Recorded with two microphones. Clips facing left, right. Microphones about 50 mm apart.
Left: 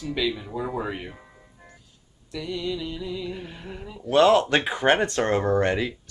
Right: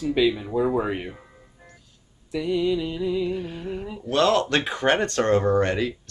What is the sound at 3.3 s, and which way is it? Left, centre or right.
Speech, centre.